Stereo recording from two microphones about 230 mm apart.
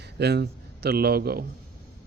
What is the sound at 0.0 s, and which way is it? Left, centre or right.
A man's voice, right.